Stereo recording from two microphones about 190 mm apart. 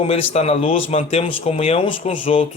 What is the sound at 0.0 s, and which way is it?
Speech, 35° left (ahead or behind).